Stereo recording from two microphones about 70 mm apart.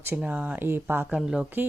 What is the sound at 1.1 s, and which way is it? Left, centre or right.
Speech, centre.